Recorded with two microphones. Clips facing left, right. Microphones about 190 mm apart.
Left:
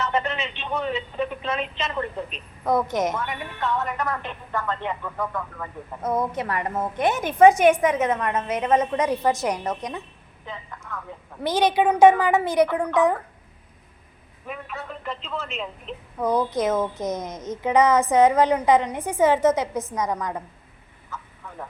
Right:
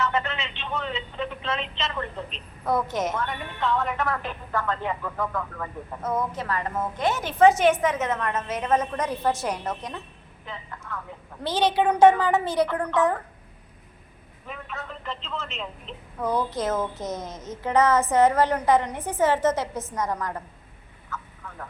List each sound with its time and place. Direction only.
0.0 s a sound: 20° left (ahead or behind)
0.6 s a woman's voice: 15° left (ahead or behind)
6.0 s a woman's voice: 15° left (ahead or behind)
10.9 s a sound: 10° left (ahead or behind)
11.4 s a woman's voice: 15° left (ahead or behind)
14.4 s a woman's voice: 10° left (ahead or behind)
16.2 s a woman's voice: 15° left (ahead or behind)